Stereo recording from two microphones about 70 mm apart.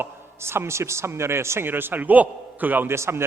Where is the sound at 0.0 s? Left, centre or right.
Right.